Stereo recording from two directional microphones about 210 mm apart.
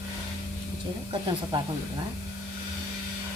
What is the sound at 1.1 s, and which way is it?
Speech, 20° right (ahead or behind).